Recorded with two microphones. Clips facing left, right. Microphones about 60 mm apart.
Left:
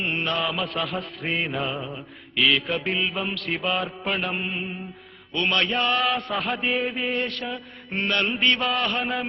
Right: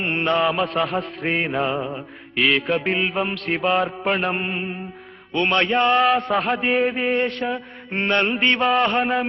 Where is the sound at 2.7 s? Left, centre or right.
Centre.